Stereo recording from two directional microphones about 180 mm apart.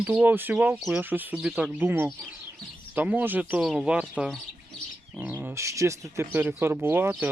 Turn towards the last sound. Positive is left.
turn(degrees=-10)  # may be behind; listen again after turning